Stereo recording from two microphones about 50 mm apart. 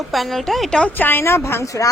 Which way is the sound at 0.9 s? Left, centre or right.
Left.